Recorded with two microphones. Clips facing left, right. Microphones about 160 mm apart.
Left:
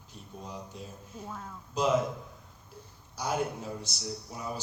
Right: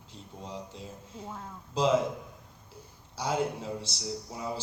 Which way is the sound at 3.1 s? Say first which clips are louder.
Right 1 dB; 25° right (ahead or behind).